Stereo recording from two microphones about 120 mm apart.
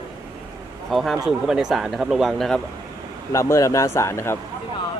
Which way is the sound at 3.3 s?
25° left (ahead or behind).